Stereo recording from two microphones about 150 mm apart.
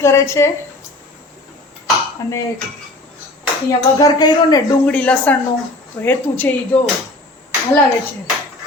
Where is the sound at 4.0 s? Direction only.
25° left (ahead or behind).